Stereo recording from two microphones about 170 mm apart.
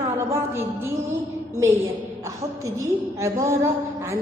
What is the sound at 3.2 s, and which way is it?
Speech, 20° right (ahead or behind).